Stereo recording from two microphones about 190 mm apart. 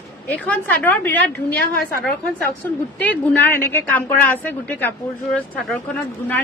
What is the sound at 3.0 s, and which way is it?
Speech, 10° left (ahead or behind).